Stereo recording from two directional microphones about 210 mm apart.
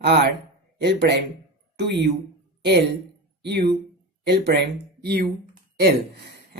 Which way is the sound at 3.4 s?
55° right (ahead or behind).